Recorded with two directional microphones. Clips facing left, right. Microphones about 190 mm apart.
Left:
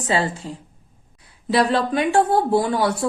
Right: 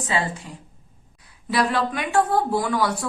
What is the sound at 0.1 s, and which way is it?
Speech, 35° left (ahead or behind).